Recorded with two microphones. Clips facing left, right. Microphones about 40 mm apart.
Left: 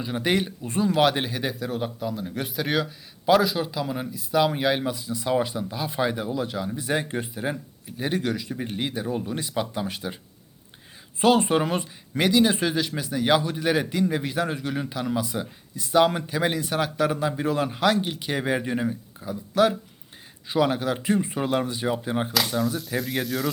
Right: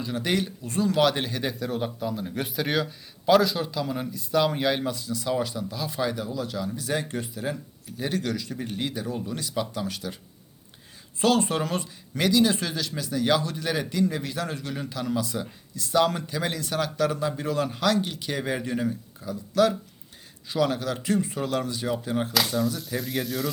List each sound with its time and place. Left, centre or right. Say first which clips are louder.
0.0 s speech: left 2 dB; left
11.2 s speech: left 3 dB; left
22.8 s speech: left 2 dB; centre